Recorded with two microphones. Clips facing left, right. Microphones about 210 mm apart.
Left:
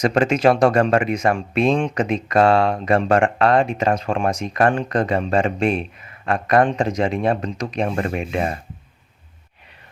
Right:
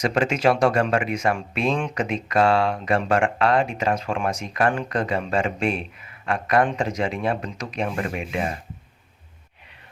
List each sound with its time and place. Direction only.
0.0 s speech: 40° left (ahead or behind)